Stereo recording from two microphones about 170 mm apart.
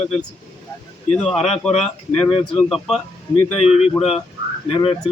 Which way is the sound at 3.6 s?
35° left (ahead or behind).